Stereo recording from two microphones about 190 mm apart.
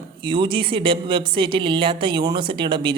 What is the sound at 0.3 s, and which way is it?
Speech, 25° right (ahead or behind).